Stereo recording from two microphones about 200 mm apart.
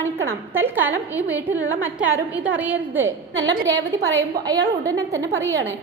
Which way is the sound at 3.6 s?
65° right (ahead or behind).